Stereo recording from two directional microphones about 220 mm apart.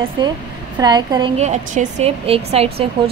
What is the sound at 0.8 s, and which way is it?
Speech, 20° right (ahead or behind).